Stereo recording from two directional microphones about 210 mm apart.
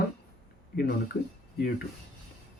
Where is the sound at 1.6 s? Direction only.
50° left (ahead or behind).